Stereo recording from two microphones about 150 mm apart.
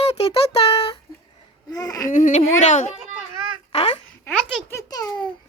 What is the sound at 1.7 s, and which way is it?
Babbling, 25° left (ahead or behind).